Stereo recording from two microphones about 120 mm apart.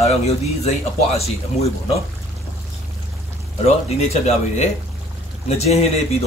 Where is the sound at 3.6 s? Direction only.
65° left (ahead or behind).